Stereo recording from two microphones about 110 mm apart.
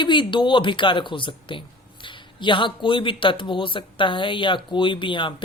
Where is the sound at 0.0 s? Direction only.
45° left (ahead or behind).